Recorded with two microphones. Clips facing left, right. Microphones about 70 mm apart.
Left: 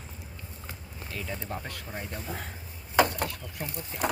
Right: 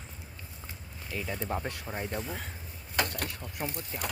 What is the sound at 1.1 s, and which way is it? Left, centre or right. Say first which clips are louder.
Speech: right 3 dB; centre.